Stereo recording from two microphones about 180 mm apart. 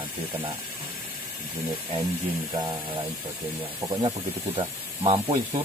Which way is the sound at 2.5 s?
30° right (ahead or behind).